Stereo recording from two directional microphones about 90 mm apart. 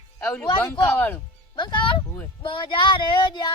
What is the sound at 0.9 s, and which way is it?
Speech, 20° left (ahead or behind).